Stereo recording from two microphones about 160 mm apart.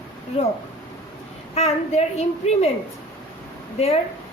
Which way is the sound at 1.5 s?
40° left (ahead or behind).